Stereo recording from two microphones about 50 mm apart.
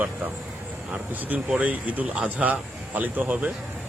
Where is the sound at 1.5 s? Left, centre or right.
Right.